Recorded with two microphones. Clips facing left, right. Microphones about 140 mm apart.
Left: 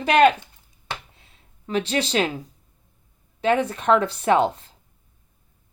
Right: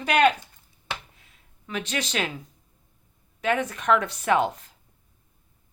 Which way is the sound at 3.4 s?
30° left (ahead or behind).